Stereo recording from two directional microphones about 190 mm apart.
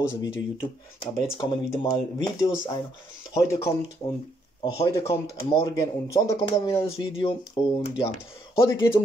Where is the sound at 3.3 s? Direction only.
15° left (ahead or behind).